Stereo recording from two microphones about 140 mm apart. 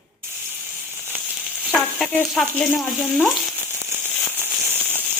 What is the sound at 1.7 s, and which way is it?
Speech, 10° left (ahead or behind).